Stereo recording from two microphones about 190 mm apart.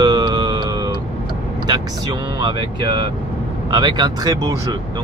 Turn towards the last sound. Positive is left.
turn(degrees=-20)  # may be behind; listen again after turning